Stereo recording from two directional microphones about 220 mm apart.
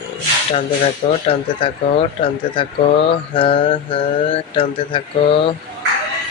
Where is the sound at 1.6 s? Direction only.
25° left (ahead or behind).